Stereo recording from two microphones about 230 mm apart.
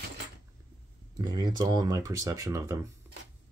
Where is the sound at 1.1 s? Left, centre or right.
Centre.